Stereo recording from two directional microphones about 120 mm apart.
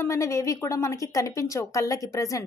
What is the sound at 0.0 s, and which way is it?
A woman's voice, 25° left (ahead or behind).